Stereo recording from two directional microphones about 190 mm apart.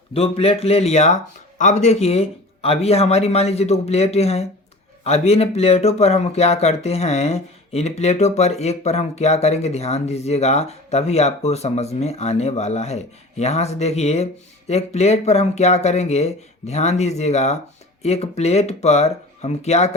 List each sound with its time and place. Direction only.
0.1 s speech: 30° left (ahead or behind)